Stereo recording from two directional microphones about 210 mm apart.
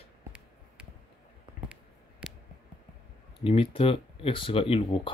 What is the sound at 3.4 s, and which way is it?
Speech, 25° left (ahead or behind).